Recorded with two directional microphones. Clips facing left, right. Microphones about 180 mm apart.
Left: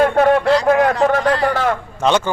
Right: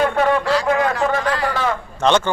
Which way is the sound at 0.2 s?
45° left (ahead or behind).